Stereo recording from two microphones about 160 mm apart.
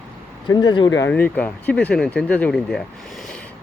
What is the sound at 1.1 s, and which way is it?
Speech, 10° left (ahead or behind).